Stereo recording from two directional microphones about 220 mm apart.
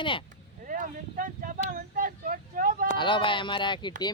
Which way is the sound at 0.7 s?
35° right (ahead or behind).